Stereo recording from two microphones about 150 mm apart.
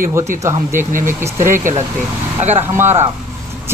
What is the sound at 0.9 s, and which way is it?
Speech, 60° right (ahead or behind).